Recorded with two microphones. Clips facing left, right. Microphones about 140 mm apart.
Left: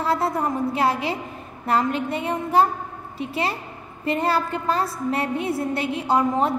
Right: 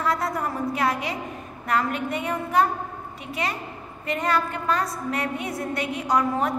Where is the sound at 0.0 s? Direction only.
30° left (ahead or behind).